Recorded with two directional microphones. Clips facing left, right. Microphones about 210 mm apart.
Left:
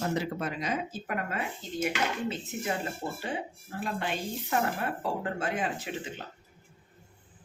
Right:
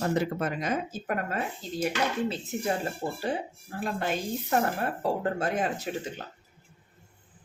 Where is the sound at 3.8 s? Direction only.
40° right (ahead or behind).